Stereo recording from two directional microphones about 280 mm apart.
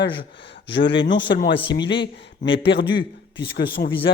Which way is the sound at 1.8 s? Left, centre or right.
Centre.